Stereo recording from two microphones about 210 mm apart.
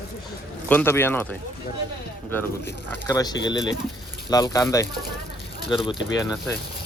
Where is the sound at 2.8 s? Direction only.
15° left (ahead or behind).